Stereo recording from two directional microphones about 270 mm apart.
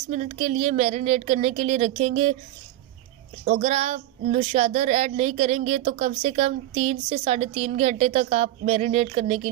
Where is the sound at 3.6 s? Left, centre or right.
Right.